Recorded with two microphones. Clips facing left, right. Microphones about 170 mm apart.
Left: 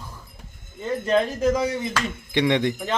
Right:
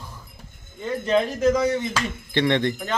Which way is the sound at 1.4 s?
10° left (ahead or behind).